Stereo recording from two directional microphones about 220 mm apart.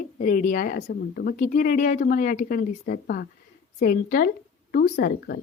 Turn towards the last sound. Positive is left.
turn(degrees=45)  # may be behind; listen again after turning